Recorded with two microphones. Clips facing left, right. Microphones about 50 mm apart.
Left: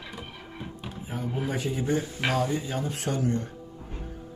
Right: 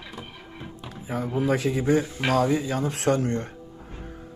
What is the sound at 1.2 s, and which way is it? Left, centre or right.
Speech, right.